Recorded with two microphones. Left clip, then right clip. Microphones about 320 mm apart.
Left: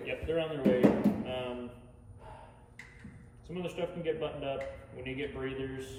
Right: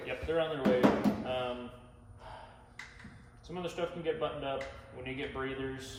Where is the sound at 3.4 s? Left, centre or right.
Right.